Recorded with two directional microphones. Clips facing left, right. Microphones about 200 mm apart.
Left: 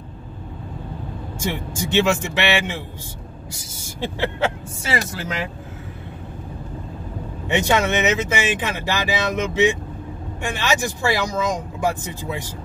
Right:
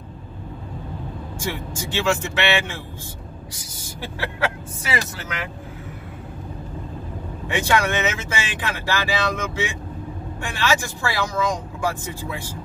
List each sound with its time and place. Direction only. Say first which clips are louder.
1.4 s speech: left 3 dB; 20° left (ahead or behind)
4.0 s speech: left 4 dB; 25° left (ahead or behind)
7.4 s speech: left 2 dB; 20° left (ahead or behind)